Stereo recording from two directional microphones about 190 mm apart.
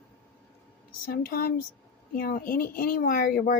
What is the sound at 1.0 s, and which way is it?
Speech, 50° left (ahead or behind).